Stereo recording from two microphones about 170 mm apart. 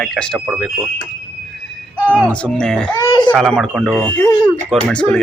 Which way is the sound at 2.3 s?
5° left (ahead or behind).